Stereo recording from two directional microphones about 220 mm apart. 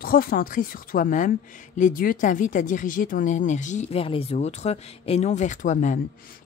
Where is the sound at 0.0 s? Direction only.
40° left (ahead or behind).